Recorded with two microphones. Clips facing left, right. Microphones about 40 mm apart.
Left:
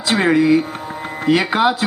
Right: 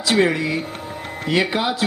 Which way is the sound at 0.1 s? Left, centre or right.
Left.